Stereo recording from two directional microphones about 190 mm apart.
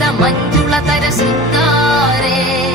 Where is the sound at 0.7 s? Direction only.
Centre (ahead or behind).